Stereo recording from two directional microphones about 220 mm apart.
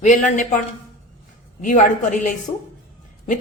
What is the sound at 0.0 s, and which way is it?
Speech, 35° left (ahead or behind).